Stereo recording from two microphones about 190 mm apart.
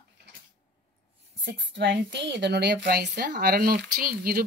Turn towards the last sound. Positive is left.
turn(degrees=-50)  # may be behind; listen again after turning